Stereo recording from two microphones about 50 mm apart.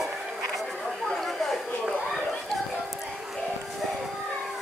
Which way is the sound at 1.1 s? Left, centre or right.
Centre.